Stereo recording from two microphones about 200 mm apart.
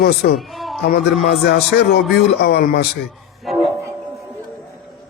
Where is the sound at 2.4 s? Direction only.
55° left (ahead or behind).